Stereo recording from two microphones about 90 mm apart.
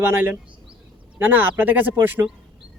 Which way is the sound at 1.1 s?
20° right (ahead or behind).